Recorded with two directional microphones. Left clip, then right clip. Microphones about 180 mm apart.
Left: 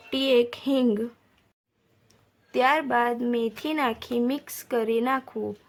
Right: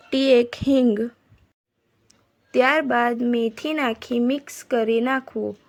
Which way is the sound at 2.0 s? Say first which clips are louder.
Right 2 dB; 25° right (ahead or behind).